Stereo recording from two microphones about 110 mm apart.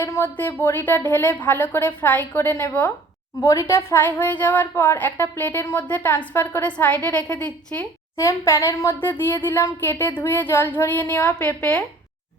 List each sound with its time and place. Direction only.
0.0 s a woman's voice: 20° left (ahead or behind)
8.1 s a woman's voice: 25° left (ahead or behind); by 11.8 s 10° left (ahead or behind)